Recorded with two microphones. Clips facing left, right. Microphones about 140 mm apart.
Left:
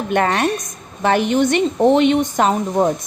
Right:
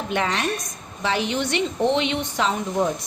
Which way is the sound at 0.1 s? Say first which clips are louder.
Left 7 dB; 55° left (ahead or behind).